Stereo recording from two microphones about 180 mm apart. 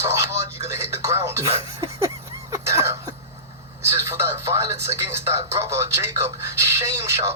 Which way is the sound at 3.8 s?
15° right (ahead or behind).